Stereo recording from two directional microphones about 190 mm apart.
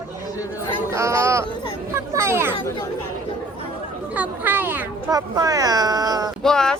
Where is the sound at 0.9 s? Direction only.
15° right (ahead or behind).